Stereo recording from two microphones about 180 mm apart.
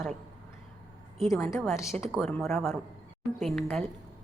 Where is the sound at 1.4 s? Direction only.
15° left (ahead or behind).